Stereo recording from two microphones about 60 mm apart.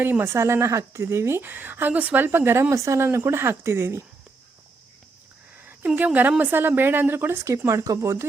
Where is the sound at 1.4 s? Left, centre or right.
Right.